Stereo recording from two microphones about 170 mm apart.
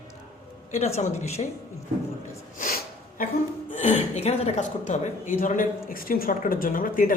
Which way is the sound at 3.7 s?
40° left (ahead or behind).